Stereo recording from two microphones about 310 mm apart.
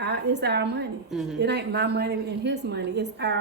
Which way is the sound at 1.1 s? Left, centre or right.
Centre.